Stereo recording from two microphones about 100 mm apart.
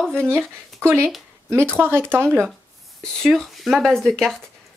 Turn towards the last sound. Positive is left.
turn(degrees=5)  # may be behind; listen again after turning